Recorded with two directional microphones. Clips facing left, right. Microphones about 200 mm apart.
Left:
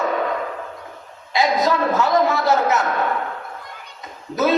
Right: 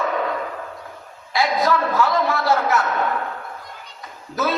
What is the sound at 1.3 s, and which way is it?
A man's voice, 20° left (ahead or behind).